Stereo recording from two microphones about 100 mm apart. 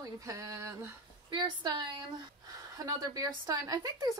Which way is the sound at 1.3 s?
50° right (ahead or behind).